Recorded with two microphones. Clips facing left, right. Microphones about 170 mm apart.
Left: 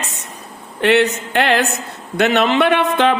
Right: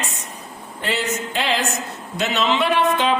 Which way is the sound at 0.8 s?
65° left (ahead or behind).